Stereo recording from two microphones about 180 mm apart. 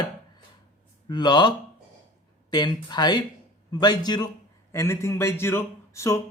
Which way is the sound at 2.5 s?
25° left (ahead or behind).